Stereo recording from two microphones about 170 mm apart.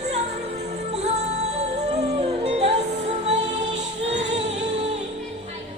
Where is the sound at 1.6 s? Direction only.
40° right (ahead or behind).